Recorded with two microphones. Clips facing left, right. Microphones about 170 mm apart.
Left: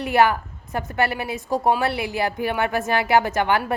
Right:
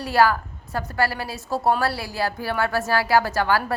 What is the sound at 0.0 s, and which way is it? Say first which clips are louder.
A woman's voice: left 1 dB; 20° left (ahead or behind).